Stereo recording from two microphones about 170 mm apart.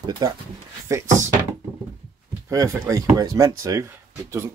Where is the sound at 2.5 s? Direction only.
20° right (ahead or behind).